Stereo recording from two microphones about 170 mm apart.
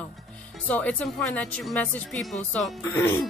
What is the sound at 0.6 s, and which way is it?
Speech, 10° left (ahead or behind).